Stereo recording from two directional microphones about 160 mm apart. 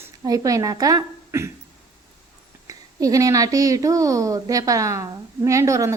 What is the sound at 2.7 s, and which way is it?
A woman's voice, 20° right (ahead or behind).